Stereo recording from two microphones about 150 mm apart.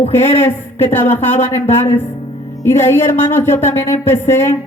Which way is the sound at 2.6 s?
15° left (ahead or behind).